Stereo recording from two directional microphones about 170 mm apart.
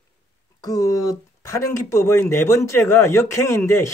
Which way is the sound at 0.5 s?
20° left (ahead or behind).